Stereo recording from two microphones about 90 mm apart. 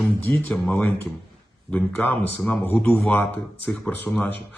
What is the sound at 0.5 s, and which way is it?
A man's voice, 15° left (ahead or behind).